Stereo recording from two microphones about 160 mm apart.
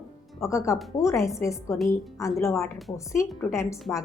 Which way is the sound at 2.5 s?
Centre (ahead or behind).